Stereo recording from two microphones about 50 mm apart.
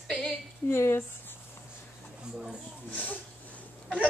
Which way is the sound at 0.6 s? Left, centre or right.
Left.